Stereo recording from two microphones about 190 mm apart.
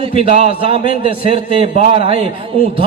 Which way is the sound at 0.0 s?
30° right (ahead or behind).